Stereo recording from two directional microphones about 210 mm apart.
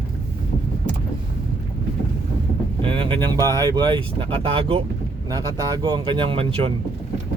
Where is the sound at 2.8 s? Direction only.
25° right (ahead or behind).